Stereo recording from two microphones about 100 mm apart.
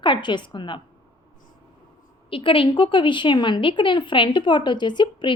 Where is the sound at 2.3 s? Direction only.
65° left (ahead or behind).